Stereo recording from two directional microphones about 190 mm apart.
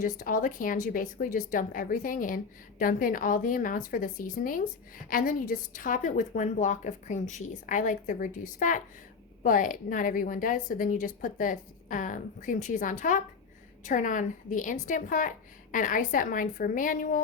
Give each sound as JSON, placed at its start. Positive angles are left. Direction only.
{"t": 0.0, "sound": "speech", "side_deg": 45}